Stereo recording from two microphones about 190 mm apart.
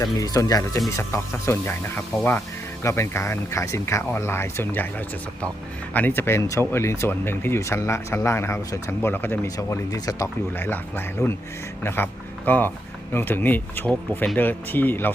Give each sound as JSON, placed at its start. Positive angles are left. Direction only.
{"t": 0.0, "sound": "speech", "side_deg": 20}